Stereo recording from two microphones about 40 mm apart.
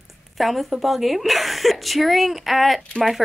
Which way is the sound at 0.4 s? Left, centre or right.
Centre.